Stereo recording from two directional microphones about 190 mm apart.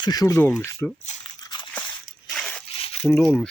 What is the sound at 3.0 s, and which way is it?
Speech, 5° left (ahead or behind).